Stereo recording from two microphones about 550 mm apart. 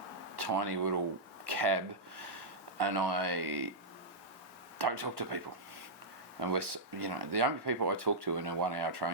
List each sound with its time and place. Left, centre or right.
0.3 s speech: right
1.5 s a sound: right
2.7 s speech: right
4.8 s speech: right
6.5 s speech: right